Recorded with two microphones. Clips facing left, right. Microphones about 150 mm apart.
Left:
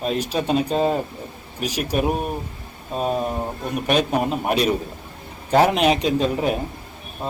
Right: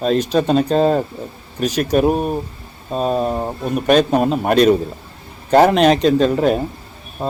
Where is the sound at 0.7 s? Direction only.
70° right (ahead or behind).